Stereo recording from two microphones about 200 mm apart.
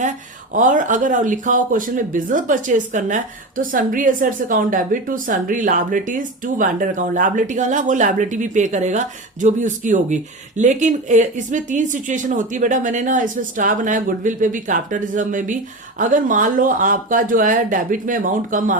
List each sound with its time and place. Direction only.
0.5 s a woman's voice: 40° right (ahead or behind)